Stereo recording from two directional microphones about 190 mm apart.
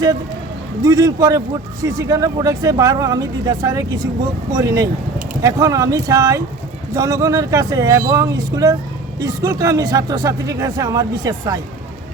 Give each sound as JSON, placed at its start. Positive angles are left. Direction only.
{"t": 0.9, "sound": "speech", "side_deg": -20}